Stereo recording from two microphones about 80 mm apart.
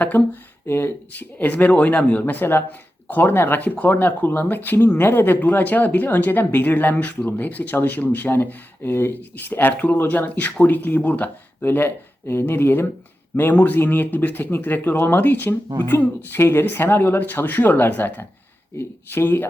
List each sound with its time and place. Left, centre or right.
0.1 s speech: left